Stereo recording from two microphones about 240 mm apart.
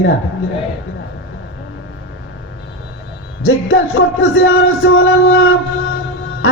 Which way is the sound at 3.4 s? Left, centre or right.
Left.